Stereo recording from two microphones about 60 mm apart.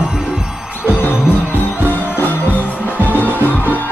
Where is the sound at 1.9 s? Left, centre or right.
Left.